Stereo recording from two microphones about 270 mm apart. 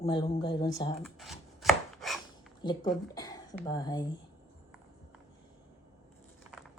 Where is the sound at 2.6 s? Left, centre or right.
Centre.